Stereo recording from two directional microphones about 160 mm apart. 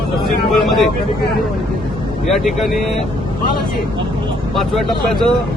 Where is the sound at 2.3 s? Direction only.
Centre (ahead or behind).